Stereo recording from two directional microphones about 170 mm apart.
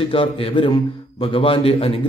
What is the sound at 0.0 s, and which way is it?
A man's voice, 30° left (ahead or behind).